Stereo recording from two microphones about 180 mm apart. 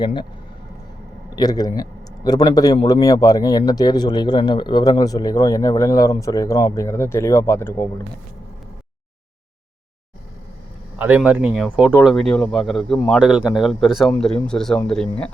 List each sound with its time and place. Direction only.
0.0 s a man's voice: 25° left (ahead or behind)
1.4 s a man's voice: 20° left (ahead or behind)
10.9 s speech: 10° right (ahead or behind)